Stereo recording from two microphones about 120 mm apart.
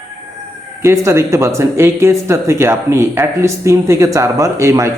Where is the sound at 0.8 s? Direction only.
25° right (ahead or behind).